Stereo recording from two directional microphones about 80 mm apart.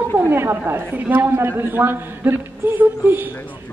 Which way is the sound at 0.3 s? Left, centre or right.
Right.